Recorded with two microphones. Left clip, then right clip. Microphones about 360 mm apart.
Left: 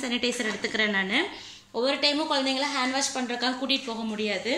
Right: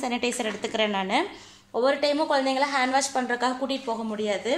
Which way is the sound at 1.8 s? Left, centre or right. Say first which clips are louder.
Right 2 dB; right.